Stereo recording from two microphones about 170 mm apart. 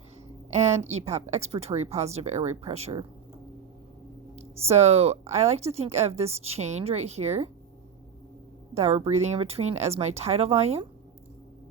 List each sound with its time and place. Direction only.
0.5 s speech: 40° right (ahead or behind)
4.4 s speech: 40° right (ahead or behind)
8.7 s speech: 40° right (ahead or behind)